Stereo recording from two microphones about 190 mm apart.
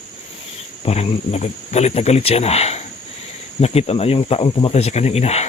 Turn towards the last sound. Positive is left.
turn(degrees=35)  # may be behind; listen again after turning